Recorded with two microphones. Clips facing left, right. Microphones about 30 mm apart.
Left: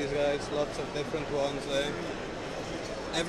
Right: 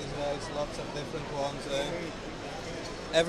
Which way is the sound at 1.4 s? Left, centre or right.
Centre.